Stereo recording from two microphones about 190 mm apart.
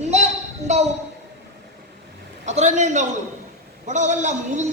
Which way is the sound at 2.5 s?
40° right (ahead or behind).